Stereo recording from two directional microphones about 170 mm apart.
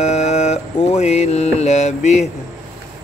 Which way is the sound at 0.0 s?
40° left (ahead or behind).